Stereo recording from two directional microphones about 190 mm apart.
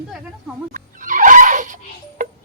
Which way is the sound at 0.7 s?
45° right (ahead or behind).